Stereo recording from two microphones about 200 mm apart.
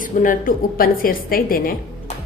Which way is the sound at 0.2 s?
45° left (ahead or behind).